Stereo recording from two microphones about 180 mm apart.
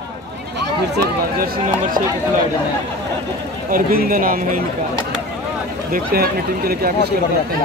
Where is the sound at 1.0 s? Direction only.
55° right (ahead or behind).